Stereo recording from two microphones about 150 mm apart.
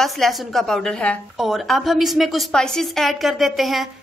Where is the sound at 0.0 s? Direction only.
Centre (ahead or behind).